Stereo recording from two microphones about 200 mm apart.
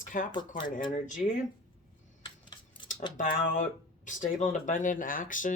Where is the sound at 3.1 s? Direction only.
45° left (ahead or behind).